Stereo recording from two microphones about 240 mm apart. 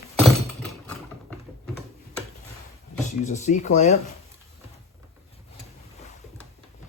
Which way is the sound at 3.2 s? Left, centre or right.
Left.